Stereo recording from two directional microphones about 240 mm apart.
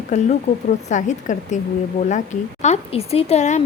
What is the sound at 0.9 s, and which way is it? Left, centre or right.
A woman's voice, left.